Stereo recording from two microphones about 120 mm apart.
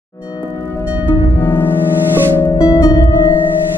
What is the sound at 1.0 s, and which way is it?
Music, 15° left (ahead or behind).